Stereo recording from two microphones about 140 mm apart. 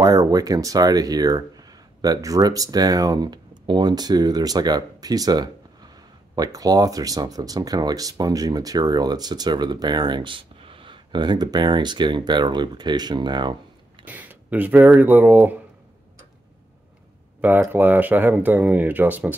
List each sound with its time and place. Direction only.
0.0 s speech: 25° right (ahead or behind)
14.0 s speech: 10° right (ahead or behind)
17.4 s speech: 15° right (ahead or behind)